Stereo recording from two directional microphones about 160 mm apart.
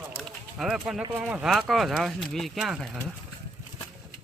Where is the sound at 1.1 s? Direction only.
5° right (ahead or behind).